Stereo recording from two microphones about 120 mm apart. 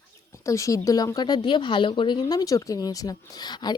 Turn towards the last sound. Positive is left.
turn(degrees=35)  # may be behind; listen again after turning